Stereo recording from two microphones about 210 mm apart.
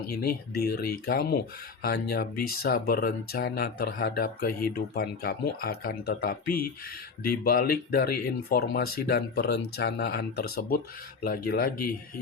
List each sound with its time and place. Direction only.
0.0 s speech: 45° left (ahead or behind)